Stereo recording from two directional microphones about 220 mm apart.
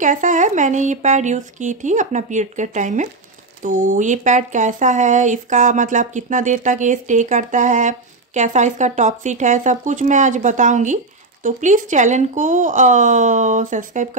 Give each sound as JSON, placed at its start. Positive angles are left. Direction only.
{"t": 0.0, "sound": "speech", "side_deg": -35}